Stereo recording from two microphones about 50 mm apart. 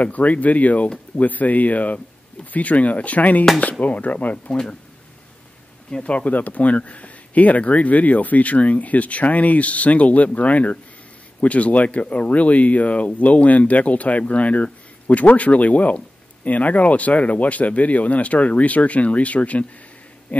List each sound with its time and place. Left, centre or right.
0.0 s speech: left
5.9 s speech: left